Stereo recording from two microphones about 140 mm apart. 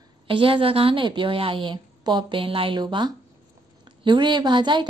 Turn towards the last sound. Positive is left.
turn(degrees=-35)  # may be behind; listen again after turning